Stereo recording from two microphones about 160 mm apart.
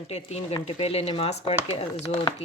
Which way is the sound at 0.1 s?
40° left (ahead or behind).